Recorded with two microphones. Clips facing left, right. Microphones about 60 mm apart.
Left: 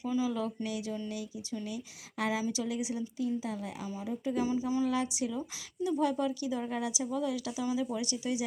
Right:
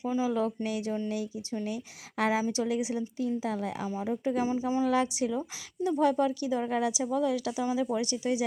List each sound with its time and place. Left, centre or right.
0.0 s a woman's voice: right
4.4 s speech: right
4.9 s a woman's voice: right